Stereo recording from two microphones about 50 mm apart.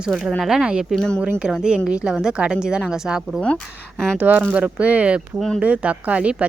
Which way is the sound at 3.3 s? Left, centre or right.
Left.